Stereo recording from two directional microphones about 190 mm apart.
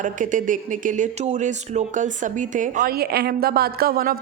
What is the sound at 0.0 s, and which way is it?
Speech, 45° right (ahead or behind).